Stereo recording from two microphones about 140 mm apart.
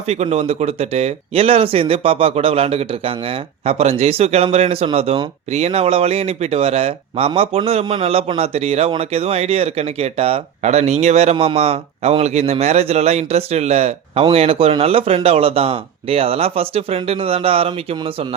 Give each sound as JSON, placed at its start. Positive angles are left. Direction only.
{"t": 0.1, "sound": "speech", "side_deg": -50}